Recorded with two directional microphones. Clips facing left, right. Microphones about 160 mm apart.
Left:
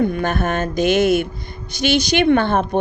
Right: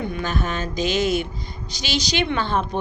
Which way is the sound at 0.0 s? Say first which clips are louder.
Left 7 dB; 50° left (ahead or behind).